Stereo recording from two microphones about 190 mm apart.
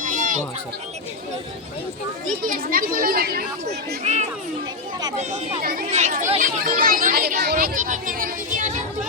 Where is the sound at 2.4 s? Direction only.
45° right (ahead or behind).